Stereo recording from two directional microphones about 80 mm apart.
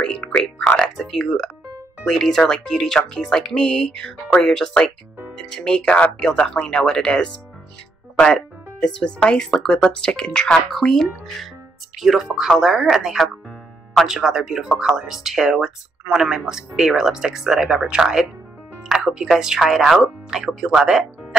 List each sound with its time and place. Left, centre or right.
0.0 s speech: centre